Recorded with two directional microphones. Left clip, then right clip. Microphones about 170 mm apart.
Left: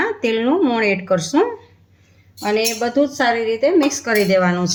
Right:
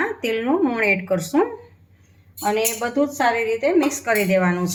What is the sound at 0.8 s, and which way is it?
Speech, 40° left (ahead or behind).